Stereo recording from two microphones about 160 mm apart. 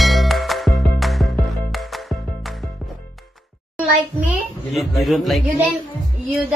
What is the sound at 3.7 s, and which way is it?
A child's voice, 5° right (ahead or behind).